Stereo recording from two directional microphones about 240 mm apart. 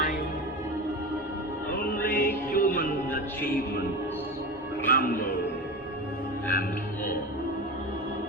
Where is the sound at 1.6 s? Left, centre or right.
Left.